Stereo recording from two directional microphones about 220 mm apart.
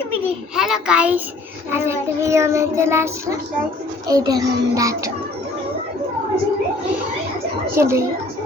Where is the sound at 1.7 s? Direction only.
10° right (ahead or behind).